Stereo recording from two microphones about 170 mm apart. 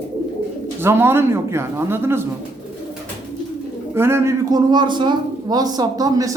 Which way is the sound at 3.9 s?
15° right (ahead or behind).